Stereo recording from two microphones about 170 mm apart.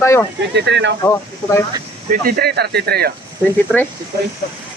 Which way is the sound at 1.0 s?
15° left (ahead or behind).